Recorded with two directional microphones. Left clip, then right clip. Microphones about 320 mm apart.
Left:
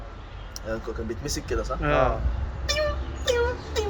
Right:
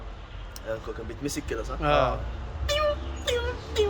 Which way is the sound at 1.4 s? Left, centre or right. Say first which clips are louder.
Left 3 dB; centre.